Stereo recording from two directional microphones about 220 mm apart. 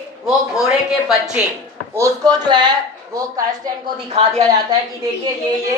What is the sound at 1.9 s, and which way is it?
Speech, 15° right (ahead or behind).